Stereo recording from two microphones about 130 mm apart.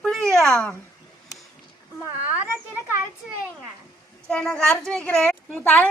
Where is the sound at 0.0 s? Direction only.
Centre (ahead or behind).